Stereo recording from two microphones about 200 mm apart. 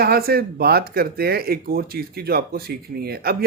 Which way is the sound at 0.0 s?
50° right (ahead or behind).